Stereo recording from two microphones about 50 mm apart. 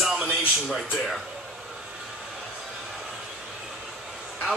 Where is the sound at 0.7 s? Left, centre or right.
Centre.